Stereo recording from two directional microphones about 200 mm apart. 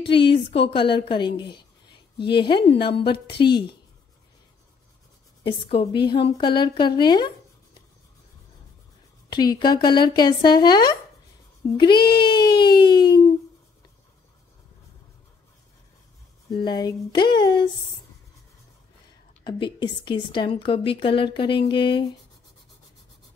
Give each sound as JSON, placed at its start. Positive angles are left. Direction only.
{"t": 0.1, "sound": "a woman's voice", "side_deg": 25}
{"t": 5.4, "sound": "a woman's voice", "side_deg": 25}
{"t": 9.3, "sound": "a woman's voice", "side_deg": 20}
{"t": 16.6, "sound": "a woman's voice", "side_deg": 20}
{"t": 19.4, "sound": "a woman's voice", "side_deg": 25}